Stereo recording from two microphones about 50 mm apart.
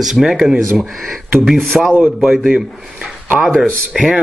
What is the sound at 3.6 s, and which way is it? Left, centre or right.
Speech, centre.